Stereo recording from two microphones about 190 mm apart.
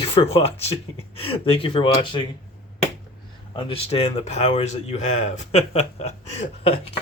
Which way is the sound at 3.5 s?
30° left (ahead or behind).